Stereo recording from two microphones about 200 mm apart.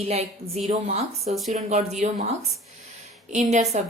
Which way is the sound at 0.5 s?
35° right (ahead or behind).